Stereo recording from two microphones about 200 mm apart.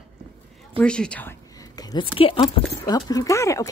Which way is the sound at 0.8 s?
5° left (ahead or behind).